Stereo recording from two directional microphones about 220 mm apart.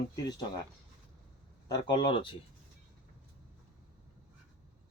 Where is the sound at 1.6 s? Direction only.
20° left (ahead or behind).